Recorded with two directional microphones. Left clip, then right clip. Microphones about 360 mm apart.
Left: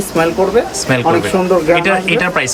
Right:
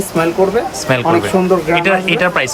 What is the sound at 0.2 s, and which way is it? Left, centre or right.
Speech, centre.